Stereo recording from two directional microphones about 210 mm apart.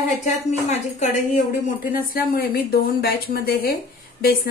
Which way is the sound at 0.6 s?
35° left (ahead or behind).